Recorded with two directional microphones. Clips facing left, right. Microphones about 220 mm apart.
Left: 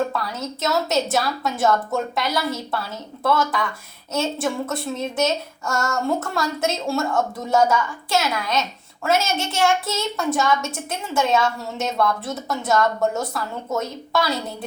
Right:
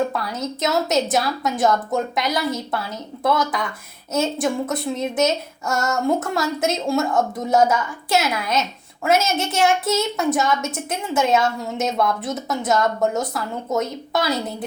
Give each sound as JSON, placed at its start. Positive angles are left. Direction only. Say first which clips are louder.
{"t": 0.1, "sound": "a woman's voice", "louder": "right 2 dB", "side_deg": -20}